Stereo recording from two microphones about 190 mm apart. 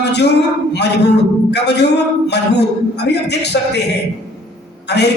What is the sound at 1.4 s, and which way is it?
A man's voice, 60° left (ahead or behind).